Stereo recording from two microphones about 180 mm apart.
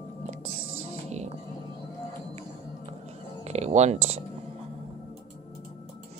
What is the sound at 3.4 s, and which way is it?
Speech, 40° right (ahead or behind).